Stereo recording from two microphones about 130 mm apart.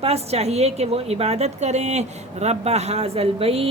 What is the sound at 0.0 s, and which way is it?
A woman's voice, 55° right (ahead or behind).